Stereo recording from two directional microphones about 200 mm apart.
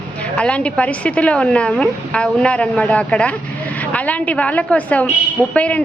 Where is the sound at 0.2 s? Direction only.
5° left (ahead or behind).